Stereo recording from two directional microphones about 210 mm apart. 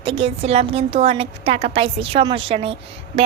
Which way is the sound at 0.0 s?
25° right (ahead or behind).